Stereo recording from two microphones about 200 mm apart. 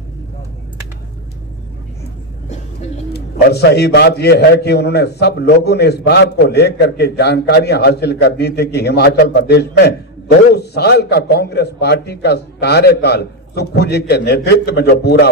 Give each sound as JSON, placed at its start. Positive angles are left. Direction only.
{"t": 3.1, "sound": "a man's voice", "side_deg": 55}